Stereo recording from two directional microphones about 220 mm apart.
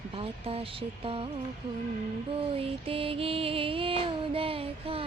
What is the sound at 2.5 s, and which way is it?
Music, 25° right (ahead or behind).